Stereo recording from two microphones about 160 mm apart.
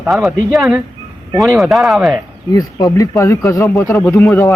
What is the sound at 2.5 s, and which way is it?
Speech, 20° left (ahead or behind).